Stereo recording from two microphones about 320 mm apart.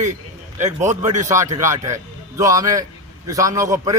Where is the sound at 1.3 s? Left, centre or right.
Centre.